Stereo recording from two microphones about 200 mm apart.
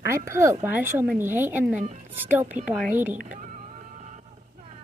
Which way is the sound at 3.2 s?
40° right (ahead or behind).